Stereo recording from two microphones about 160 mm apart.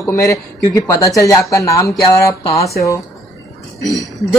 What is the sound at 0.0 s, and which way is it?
Speech, 15° left (ahead or behind).